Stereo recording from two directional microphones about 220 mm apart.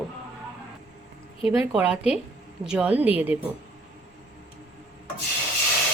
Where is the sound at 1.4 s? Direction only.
25° left (ahead or behind).